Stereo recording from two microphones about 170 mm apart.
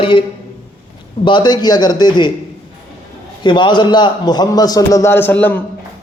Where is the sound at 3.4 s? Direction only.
25° left (ahead or behind).